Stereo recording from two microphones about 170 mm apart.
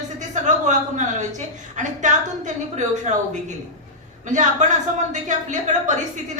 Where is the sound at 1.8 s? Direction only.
45° right (ahead or behind).